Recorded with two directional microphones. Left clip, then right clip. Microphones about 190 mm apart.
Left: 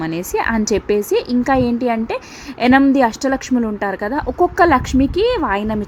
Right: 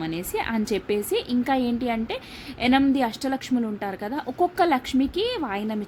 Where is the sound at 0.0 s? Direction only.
15° left (ahead or behind).